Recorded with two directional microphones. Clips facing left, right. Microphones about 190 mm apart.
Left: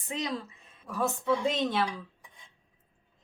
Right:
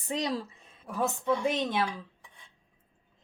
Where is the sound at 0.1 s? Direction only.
35° right (ahead or behind).